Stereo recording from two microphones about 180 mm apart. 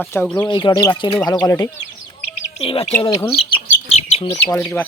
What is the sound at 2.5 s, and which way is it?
Speech, 35° left (ahead or behind).